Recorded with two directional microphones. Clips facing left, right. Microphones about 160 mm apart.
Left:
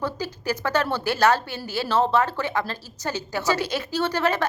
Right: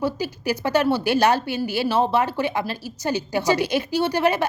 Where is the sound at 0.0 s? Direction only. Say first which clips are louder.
Right 4 dB; 10° right (ahead or behind).